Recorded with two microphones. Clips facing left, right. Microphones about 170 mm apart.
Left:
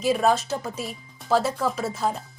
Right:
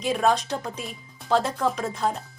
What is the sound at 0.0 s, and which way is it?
A woman's voice, 5° left (ahead or behind).